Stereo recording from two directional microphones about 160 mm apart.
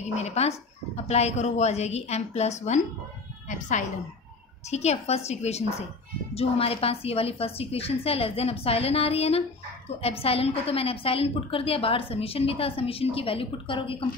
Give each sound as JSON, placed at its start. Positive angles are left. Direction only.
{"t": 0.1, "sound": "a woman's voice", "side_deg": 45}